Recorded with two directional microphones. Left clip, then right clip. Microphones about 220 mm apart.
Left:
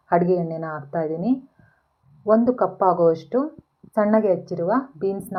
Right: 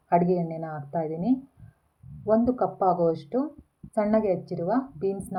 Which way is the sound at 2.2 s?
15° left (ahead or behind).